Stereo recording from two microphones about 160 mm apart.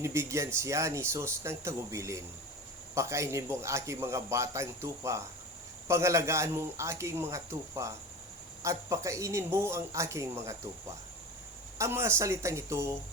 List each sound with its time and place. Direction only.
0.0 s a man's voice: 20° right (ahead or behind)
11.8 s a man's voice: 15° right (ahead or behind)